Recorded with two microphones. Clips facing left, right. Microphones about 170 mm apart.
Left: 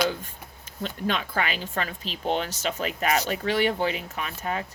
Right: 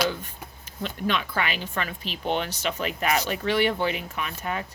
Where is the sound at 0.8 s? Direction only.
40° left (ahead or behind).